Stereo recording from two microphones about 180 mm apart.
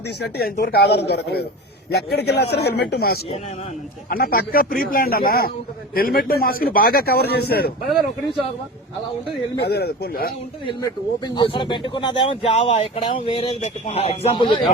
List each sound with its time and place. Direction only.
0.3 s a man's voice: 50° left (ahead or behind)
0.8 s a man's voice: 65° left (ahead or behind)
9.6 s a man's voice: 65° left (ahead or behind)
11.3 s speech: 25° left (ahead or behind)